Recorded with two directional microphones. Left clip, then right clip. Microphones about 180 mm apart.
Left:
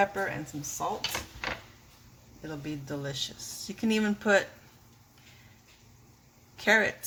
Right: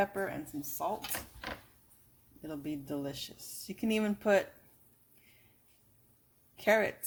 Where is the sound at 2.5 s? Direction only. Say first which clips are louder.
Left 2 dB; 30° right (ahead or behind).